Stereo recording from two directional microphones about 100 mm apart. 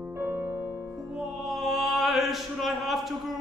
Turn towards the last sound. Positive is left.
turn(degrees=0)  # may be behind; listen again after turning